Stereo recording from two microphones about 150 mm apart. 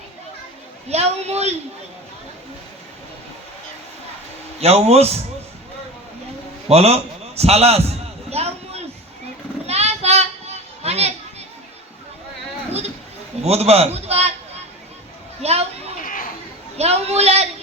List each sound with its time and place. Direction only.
0.9 s speech: 45° right (ahead or behind)
4.6 s speech: 45° right (ahead or behind)
6.7 s a man's voice: 45° right (ahead or behind)
7.9 s a sound: 45° right (ahead or behind)
9.6 s children playing: 45° right (ahead or behind)
13.4 s a sound: 45° right (ahead or behind)
16.0 s chatter: 65° left (ahead or behind)
16.7 s speech: 45° right (ahead or behind)